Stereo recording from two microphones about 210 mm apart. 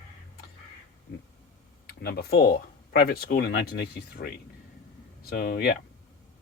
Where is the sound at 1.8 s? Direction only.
50° left (ahead or behind).